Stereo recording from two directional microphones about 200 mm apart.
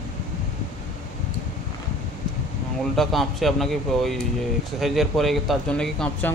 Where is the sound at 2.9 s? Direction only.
Centre (ahead or behind).